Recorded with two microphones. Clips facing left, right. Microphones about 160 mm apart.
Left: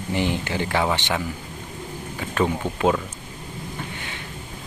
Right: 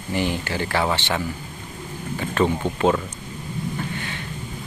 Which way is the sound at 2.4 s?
10° left (ahead or behind).